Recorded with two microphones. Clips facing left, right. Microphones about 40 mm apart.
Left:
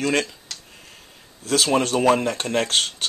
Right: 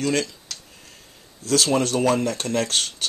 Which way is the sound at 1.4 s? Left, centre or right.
Centre.